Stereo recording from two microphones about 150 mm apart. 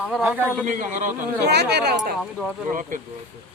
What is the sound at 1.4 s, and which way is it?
Speech, 90° right.